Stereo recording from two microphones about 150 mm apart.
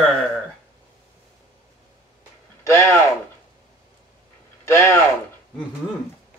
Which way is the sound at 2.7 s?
20° left (ahead or behind).